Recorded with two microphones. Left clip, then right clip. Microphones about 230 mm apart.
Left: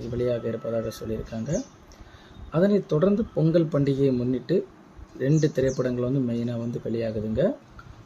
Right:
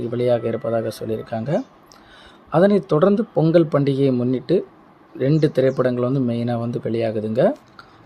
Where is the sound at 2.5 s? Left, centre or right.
Centre.